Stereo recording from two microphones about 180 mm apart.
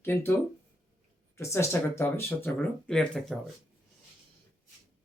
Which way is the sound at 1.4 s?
15° left (ahead or behind).